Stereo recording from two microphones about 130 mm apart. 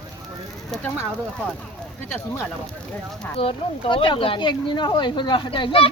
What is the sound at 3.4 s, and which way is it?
Speech, 45° left (ahead or behind).